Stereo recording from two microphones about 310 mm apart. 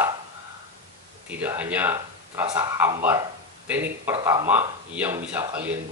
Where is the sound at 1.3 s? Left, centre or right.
Centre.